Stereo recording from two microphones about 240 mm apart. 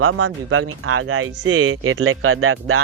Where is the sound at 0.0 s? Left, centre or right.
Right.